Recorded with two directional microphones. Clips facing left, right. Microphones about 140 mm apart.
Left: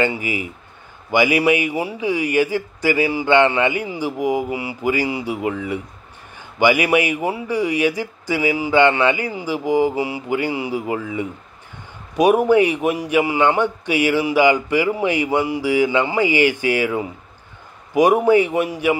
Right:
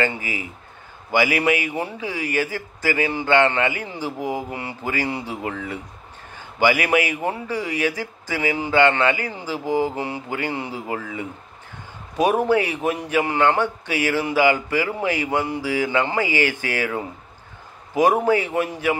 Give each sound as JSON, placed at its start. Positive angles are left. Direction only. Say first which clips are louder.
{"t": 0.0, "sound": "a man's voice", "louder": "left 4 dB", "side_deg": 15}